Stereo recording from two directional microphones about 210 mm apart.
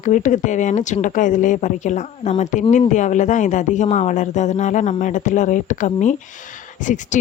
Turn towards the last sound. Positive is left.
turn(degrees=35)  # may be behind; listen again after turning